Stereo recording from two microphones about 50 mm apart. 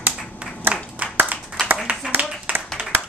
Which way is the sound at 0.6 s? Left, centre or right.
Right.